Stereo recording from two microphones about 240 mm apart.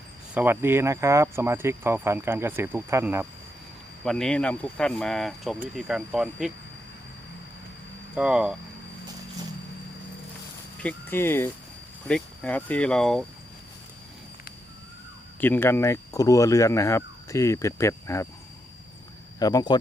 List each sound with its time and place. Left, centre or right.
0.3 s speech: centre
4.0 s speech: centre
8.1 s speech: centre
10.8 s speech: centre
15.4 s speech: centre
19.4 s speech: centre